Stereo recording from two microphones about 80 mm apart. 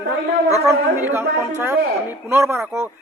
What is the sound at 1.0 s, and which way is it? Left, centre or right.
A man's voice, right.